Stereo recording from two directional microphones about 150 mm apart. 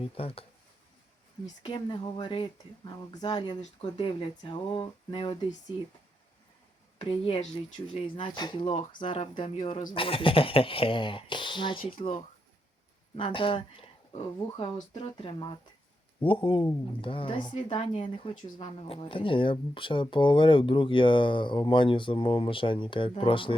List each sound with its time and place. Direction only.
0.0 s a woman's voice: 40° left (ahead or behind)
1.6 s a woman's voice: 30° left (ahead or behind)
7.0 s a woman's voice: 35° left (ahead or behind)
13.1 s a woman's voice: 35° left (ahead or behind)